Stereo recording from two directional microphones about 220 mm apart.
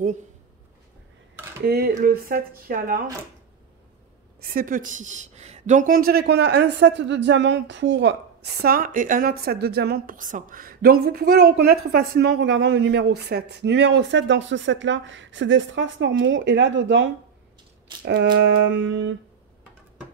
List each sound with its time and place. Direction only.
1.7 s speech: 45° right (ahead or behind)
4.4 s a woman's voice: 40° right (ahead or behind); by 17.1 s 55° right (ahead or behind)
18.8 s a sound: 55° right (ahead or behind)